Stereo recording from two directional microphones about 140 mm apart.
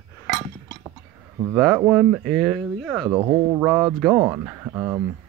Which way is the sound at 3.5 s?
10° right (ahead or behind).